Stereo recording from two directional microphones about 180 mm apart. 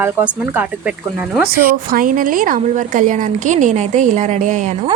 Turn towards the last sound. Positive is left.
turn(degrees=-40)  # may be behind; listen again after turning